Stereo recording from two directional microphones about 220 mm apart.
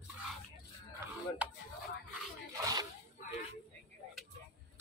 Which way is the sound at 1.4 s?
5° right (ahead or behind).